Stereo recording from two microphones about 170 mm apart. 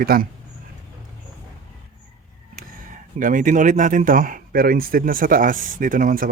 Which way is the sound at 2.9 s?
50° right (ahead or behind).